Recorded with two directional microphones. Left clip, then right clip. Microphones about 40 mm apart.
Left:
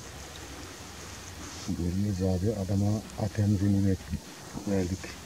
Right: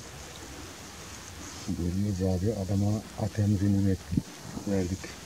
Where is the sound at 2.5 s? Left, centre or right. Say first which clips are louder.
Even; right.